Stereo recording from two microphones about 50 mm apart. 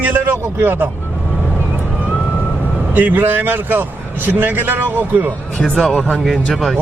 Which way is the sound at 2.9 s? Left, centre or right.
Right.